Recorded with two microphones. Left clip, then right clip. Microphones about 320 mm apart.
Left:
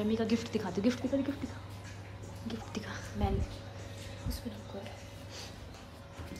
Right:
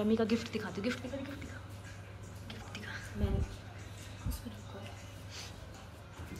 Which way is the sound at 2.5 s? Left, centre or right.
Centre.